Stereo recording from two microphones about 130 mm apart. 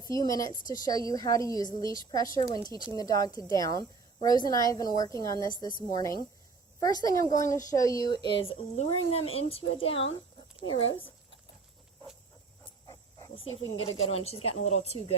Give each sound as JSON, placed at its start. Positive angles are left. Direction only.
{"t": 0.0, "sound": "a woman's voice", "side_deg": 25}
{"t": 6.8, "sound": "a woman's voice", "side_deg": 25}
{"t": 8.7, "sound": "speech", "side_deg": 55}
{"t": 13.3, "sound": "speech", "side_deg": 50}